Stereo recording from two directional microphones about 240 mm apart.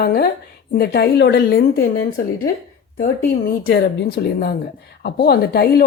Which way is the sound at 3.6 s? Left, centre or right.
Left.